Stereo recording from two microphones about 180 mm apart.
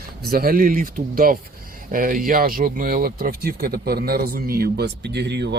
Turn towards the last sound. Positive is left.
turn(degrees=-70)  # may be behind; listen again after turning